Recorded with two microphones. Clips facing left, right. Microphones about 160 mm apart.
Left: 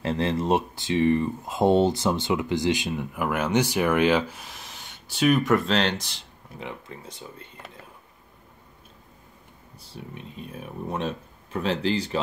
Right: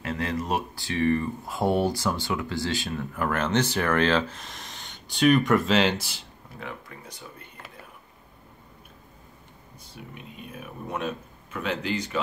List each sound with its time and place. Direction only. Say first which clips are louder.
0.0 s speech: left 4 dB; 30° left (ahead or behind); by 6.2 s 5° right (ahead or behind)
6.6 s speech: left 2 dB; 25° left (ahead or behind)
9.9 s speech: left 3 dB; 35° left (ahead or behind)